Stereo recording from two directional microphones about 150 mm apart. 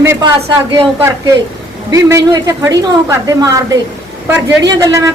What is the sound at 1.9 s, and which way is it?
A woman's voice, 20° right (ahead or behind).